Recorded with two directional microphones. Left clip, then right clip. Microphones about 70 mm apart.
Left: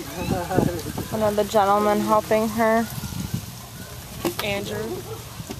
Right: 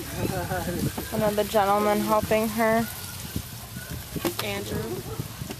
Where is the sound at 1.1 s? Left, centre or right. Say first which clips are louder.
Left 3 dB; centre.